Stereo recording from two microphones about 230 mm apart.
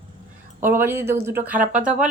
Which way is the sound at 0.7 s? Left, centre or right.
Centre.